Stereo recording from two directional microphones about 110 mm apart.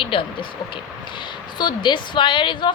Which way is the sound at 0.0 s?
50° left (ahead or behind).